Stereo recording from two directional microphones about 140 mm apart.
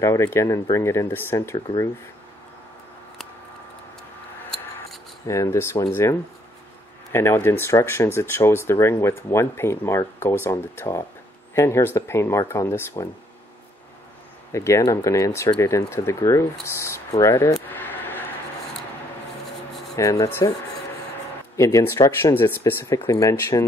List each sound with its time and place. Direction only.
0.0 s speech: 20° left (ahead or behind)
5.2 s speech: 20° left (ahead or behind)
7.1 s speech: 20° left (ahead or behind)
14.5 s speech: 20° left (ahead or behind)
17.6 s a sound: 15° left (ahead or behind)
20.0 s speech: 25° left (ahead or behind)
21.5 s speech: 20° left (ahead or behind)